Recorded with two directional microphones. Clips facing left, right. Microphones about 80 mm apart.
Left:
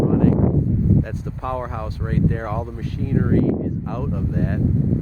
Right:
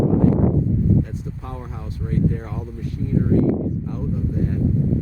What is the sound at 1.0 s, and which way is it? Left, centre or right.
Speech, left.